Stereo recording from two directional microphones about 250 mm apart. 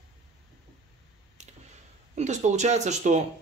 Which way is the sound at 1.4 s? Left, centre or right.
Right.